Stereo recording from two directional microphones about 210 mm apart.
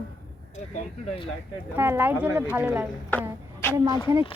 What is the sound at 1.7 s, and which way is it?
A woman's voice, 10° right (ahead or behind).